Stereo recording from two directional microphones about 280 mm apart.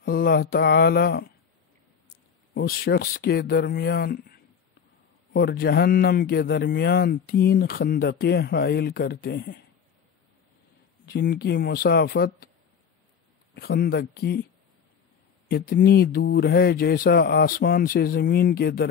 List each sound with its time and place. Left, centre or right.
0.0 s speech: left
2.5 s speech: left
11.1 s speech: left
13.6 s speech: left
15.4 s speech: left